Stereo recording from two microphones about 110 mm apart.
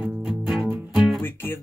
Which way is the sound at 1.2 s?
20° left (ahead or behind).